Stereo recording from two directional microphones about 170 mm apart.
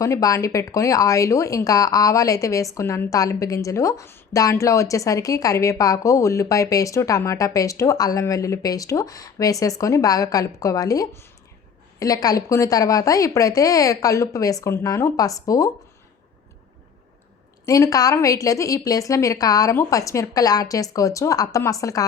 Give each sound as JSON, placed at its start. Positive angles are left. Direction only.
{"t": 0.0, "sound": "a woman's voice", "side_deg": 20}
{"t": 17.7, "sound": "a woman's voice", "side_deg": 20}